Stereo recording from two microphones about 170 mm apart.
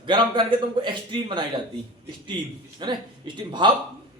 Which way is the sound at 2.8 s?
25° right (ahead or behind).